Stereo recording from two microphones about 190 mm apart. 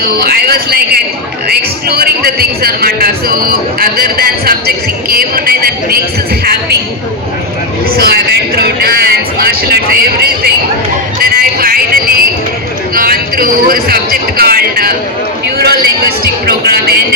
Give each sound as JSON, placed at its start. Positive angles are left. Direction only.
{"t": 0.0, "sound": "speech", "side_deg": -55}
{"t": 7.9, "sound": "speech", "side_deg": -55}